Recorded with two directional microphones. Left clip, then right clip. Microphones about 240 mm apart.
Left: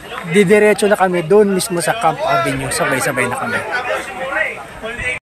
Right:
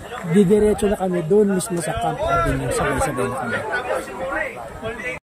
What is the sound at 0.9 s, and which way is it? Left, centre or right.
Speech, left.